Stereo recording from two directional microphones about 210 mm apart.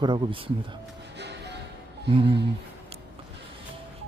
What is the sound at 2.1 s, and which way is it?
Speech, 25° right (ahead or behind).